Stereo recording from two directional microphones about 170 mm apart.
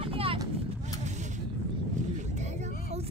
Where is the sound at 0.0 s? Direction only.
35° right (ahead or behind).